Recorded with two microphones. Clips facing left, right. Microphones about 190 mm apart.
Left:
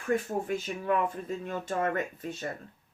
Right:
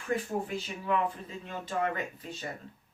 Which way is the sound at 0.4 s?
50° left (ahead or behind).